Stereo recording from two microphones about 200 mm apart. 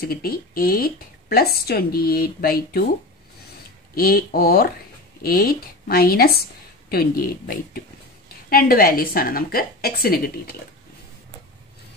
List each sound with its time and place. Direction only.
0.0 s speech: 50° left (ahead or behind)
3.9 s speech: 45° left (ahead or behind)